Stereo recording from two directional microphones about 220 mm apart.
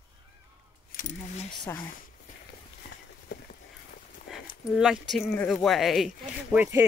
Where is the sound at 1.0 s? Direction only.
35° left (ahead or behind).